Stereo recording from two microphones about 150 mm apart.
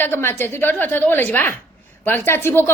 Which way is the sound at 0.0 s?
15° left (ahead or behind).